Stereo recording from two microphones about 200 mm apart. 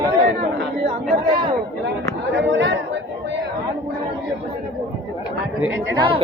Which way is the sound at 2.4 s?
65° right (ahead or behind).